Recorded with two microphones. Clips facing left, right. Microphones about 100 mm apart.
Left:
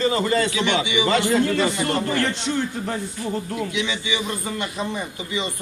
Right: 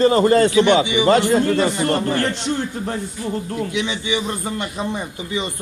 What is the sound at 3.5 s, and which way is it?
Speech, 30° right (ahead or behind).